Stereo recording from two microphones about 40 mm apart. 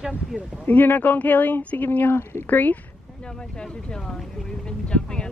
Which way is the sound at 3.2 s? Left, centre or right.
Centre.